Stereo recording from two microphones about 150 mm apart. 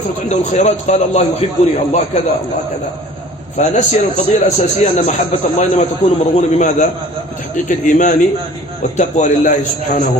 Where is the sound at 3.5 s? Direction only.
50° left (ahead or behind).